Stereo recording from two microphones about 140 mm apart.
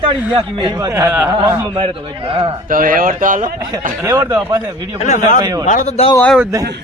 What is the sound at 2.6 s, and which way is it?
Speech, 75° right (ahead or behind).